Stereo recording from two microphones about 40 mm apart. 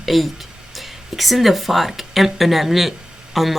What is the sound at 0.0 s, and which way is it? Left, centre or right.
Speech, centre.